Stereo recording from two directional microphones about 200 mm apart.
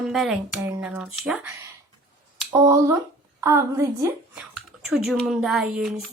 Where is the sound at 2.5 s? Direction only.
15° right (ahead or behind).